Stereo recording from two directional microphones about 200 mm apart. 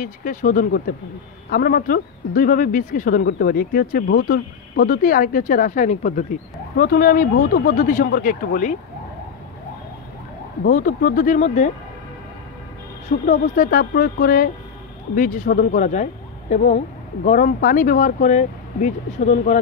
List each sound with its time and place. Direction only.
0.0 s speech: 40° left (ahead or behind)
10.7 s speech: 45° left (ahead or behind)
13.3 s speech: 45° left (ahead or behind)